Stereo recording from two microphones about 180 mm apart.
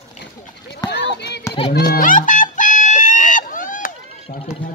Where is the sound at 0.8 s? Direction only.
70° left (ahead or behind).